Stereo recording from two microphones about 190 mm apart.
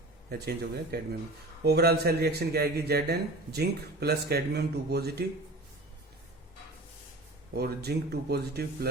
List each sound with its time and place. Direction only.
0.3 s a man's voice: 55° right (ahead or behind)
7.5 s a man's voice: 55° right (ahead or behind)